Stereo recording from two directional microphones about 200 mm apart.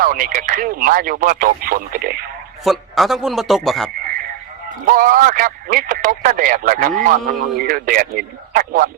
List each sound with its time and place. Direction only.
0.0 s speech: 45° right (ahead or behind)
2.6 s a man's voice: centre (ahead or behind)
4.9 s speech: 45° right (ahead or behind)